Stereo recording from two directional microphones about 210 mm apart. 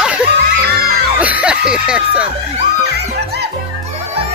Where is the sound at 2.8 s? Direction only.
50° right (ahead or behind).